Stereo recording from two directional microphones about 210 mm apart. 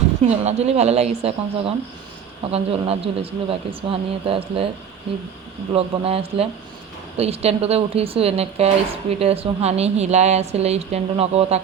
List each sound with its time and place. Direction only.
0.2 s a woman's voice: 30° right (ahead or behind)
5.7 s speech: 25° right (ahead or behind)